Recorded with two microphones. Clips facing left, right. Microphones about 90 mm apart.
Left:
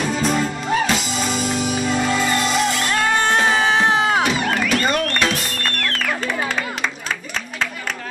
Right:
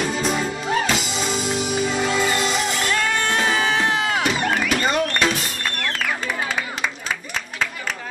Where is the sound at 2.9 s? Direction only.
25° left (ahead or behind).